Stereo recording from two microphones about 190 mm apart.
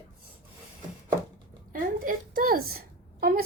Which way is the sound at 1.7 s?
45° right (ahead or behind).